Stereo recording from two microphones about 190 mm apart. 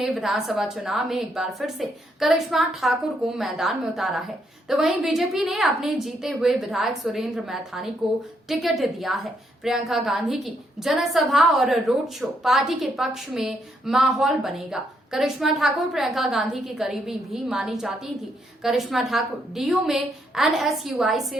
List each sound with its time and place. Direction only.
0.0 s a woman's voice: centre (ahead or behind)